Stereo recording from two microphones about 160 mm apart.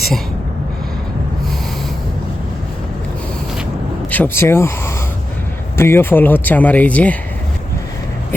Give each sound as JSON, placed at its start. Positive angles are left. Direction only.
{"t": 4.1, "sound": "speech", "side_deg": 15}
{"t": 5.7, "sound": "speech", "side_deg": 15}